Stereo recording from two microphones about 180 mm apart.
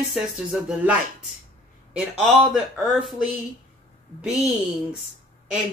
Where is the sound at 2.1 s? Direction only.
Centre (ahead or behind).